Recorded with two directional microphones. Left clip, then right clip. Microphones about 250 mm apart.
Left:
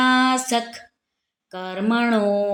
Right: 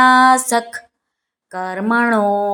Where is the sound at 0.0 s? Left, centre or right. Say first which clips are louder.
Right 8 dB; centre.